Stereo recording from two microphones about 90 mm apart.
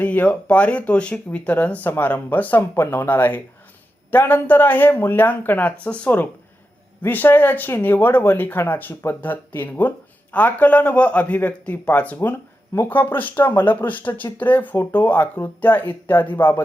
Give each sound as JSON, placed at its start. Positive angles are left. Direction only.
{"t": 0.0, "sound": "speech", "side_deg": 15}